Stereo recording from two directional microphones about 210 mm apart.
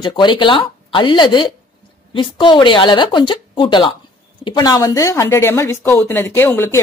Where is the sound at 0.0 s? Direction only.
20° left (ahead or behind).